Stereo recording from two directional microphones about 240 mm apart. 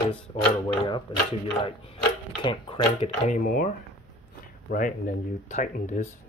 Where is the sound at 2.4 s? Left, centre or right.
Left.